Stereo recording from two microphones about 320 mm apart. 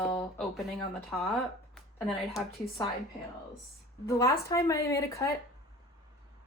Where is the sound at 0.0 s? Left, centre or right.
Centre.